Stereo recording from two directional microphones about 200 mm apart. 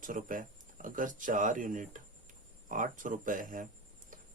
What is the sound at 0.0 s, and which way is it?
Speech, 40° right (ahead or behind).